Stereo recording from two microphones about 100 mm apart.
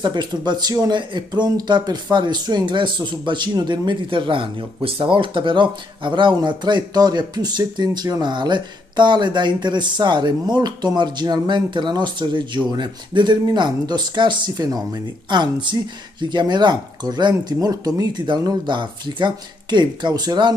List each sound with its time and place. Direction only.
0.0 s speech: 50° right (ahead or behind)